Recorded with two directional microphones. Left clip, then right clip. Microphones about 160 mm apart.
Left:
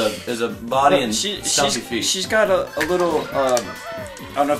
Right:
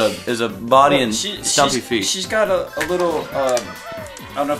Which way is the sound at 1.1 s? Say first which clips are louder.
Even; 25° right (ahead or behind).